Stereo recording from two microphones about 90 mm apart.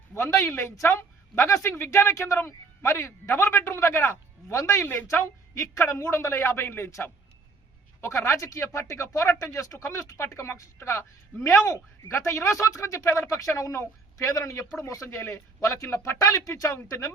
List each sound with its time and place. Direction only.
0.1 s speech: 30° left (ahead or behind)